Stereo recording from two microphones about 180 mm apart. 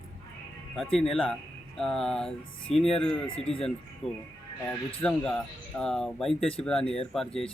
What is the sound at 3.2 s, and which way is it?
Speech, 30° left (ahead or behind).